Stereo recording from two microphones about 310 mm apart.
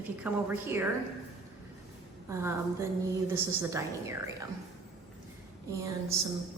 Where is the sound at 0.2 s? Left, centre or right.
Centre.